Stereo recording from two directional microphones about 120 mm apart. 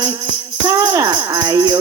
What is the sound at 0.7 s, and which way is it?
Music, 25° right (ahead or behind).